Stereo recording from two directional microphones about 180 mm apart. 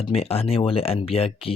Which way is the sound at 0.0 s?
30° left (ahead or behind).